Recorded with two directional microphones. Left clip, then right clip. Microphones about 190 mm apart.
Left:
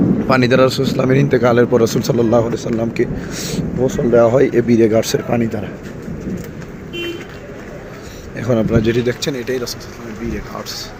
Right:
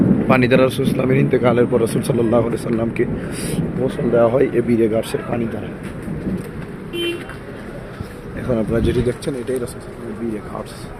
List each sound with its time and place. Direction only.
0.3 s speech: 15° left (ahead or behind)
3.8 s speech: 30° left (ahead or behind)
4.4 s speech: 15° left (ahead or behind)
8.4 s speech: 20° left (ahead or behind)